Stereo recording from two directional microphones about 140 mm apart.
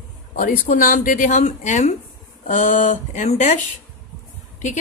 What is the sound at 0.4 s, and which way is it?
A woman's voice, 70° left (ahead or behind).